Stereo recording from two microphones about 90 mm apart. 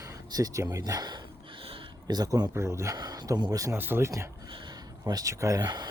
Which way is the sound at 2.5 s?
30° right (ahead or behind).